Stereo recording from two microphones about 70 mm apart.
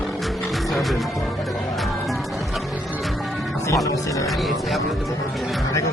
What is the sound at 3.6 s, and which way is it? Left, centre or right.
Speech, left.